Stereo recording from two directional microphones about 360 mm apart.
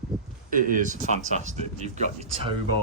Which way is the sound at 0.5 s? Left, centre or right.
Right.